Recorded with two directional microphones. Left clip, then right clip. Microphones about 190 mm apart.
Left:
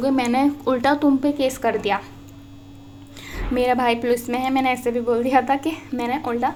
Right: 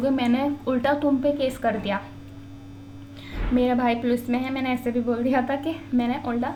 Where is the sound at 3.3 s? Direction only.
40° left (ahead or behind).